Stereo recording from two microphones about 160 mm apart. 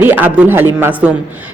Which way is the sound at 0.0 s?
10° right (ahead or behind).